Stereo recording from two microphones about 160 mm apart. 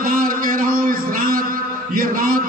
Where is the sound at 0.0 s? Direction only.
60° right (ahead or behind).